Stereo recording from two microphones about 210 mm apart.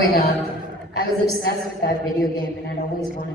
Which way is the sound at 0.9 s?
50° left (ahead or behind).